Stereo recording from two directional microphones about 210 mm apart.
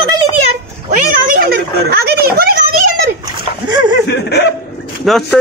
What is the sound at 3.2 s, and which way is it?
Splash, 20° right (ahead or behind).